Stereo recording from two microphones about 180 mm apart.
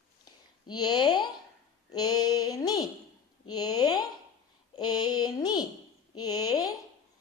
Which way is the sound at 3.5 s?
20° left (ahead or behind).